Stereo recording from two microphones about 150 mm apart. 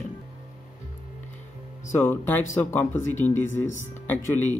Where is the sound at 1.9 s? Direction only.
15° left (ahead or behind).